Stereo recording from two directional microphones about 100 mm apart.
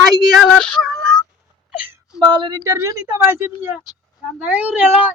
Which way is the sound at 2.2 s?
50° right (ahead or behind).